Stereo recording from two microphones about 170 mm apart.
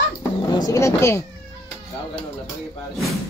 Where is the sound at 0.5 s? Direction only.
20° left (ahead or behind).